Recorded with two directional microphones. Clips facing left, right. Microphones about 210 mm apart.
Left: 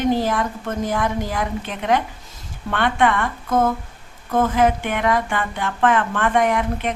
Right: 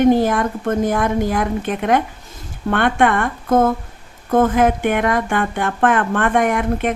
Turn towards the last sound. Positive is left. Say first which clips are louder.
# right 3 dB
turn(degrees=-50)  # may be behind; listen again after turning